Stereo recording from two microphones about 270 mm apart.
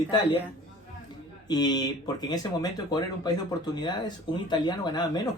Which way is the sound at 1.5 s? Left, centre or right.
Centre.